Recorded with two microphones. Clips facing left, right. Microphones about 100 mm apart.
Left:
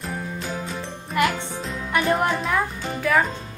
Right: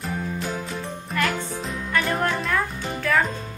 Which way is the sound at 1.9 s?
15° left (ahead or behind).